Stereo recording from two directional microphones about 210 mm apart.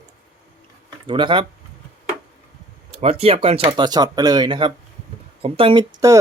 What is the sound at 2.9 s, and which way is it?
Speech, 30° right (ahead or behind).